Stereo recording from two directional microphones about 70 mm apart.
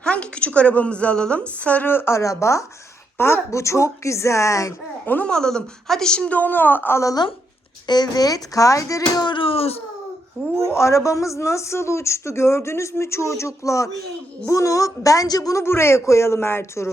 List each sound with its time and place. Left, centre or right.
0.0 s a woman's voice: centre
1.9 s speech: left
5.0 s a woman's voice: left
5.3 s a woman's voice: centre; by 7.0 s left
7.9 s a child's voice: left
10.4 s a woman's voice: left
10.7 s speech: left
15.5 s speech: left